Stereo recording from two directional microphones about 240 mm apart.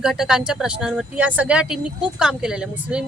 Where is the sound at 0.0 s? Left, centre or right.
Centre.